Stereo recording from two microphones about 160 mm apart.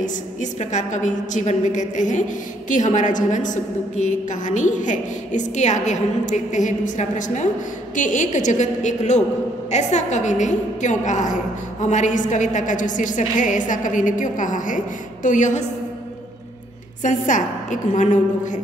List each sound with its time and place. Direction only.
0.0 s a woman's voice: 50° left (ahead or behind)
17.0 s a woman's voice: 50° left (ahead or behind)